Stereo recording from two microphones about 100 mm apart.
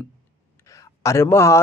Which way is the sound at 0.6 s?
30° left (ahead or behind).